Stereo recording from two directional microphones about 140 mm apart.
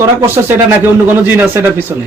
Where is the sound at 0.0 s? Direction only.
20° right (ahead or behind).